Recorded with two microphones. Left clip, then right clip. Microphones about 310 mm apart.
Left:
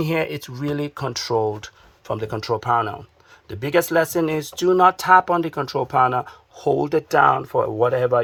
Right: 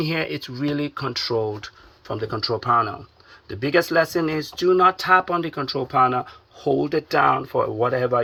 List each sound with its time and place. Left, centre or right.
0.1 s speech: centre